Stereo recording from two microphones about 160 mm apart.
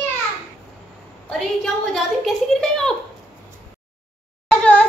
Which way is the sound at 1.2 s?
Centre (ahead or behind).